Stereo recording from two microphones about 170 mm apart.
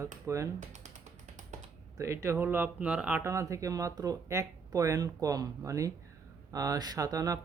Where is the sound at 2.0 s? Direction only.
15° right (ahead or behind).